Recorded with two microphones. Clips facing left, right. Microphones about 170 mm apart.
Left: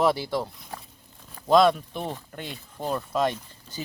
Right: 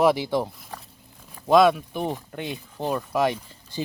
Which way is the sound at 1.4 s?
5° right (ahead or behind).